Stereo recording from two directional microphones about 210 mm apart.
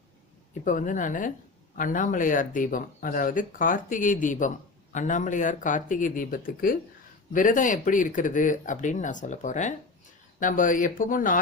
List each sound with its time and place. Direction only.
0.6 s speech: 35° left (ahead or behind)